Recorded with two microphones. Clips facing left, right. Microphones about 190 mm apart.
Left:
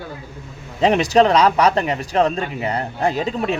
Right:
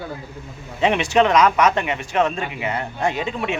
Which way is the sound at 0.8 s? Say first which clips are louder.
Left 3 dB; 35° left (ahead or behind).